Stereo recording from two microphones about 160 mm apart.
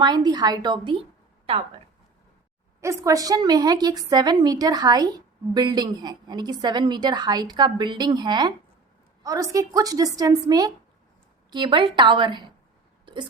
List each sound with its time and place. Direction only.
0.0 s a woman's voice: 25° right (ahead or behind)
2.8 s a woman's voice: 20° right (ahead or behind)